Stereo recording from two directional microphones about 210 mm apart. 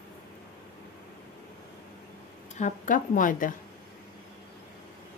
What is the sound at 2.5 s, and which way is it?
Speech, 35° left (ahead or behind).